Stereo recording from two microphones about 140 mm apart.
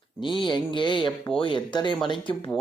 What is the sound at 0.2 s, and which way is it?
Speech, 35° left (ahead or behind).